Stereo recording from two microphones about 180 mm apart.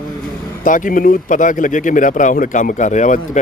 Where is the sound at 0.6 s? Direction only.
45° left (ahead or behind).